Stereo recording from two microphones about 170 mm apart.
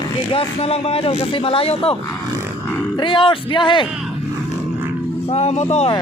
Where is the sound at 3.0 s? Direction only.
30° left (ahead or behind).